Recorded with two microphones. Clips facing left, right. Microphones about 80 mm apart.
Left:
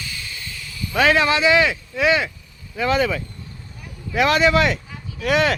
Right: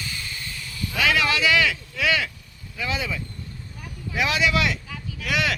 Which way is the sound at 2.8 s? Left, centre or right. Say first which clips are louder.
Left 9 dB; left.